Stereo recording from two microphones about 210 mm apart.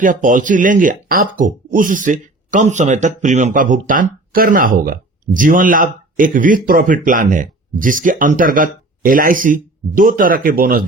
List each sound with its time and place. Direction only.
0.0 s speech: 40° right (ahead or behind)